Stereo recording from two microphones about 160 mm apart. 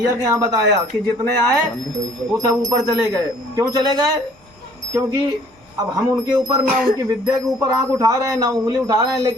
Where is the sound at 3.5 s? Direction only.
20° right (ahead or behind).